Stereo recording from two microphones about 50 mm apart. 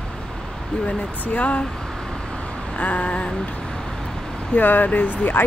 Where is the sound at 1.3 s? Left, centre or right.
Left.